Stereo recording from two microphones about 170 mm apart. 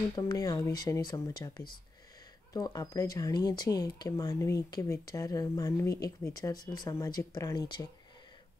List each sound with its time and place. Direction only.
0.1 s speech: 20° left (ahead or behind)
2.5 s speech: 20° left (ahead or behind)